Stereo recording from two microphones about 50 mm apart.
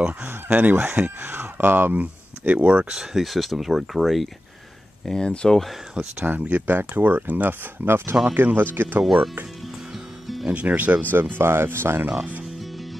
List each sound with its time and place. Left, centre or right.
0.5 s speech: right
2.9 s speech: centre
5.0 s speech: centre
5.5 s speech: centre
6.2 s speech: right
7.8 s speech: right
9.0 s speech: centre
9.9 s music: centre
10.4 s speech: right
12.5 s music: centre